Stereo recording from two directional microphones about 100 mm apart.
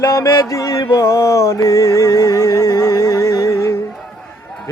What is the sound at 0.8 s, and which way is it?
Music, 35° left (ahead or behind).